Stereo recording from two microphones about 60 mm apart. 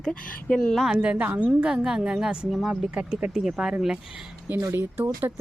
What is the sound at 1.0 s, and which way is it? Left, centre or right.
Speech, centre.